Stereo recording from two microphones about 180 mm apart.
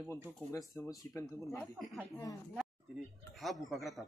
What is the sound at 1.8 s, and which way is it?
Speech, centre (ahead or behind).